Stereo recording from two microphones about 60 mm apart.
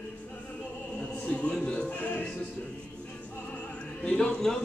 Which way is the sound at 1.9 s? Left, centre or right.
Left.